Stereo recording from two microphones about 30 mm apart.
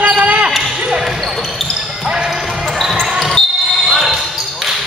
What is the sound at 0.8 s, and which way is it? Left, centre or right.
Basketball bounce, centre.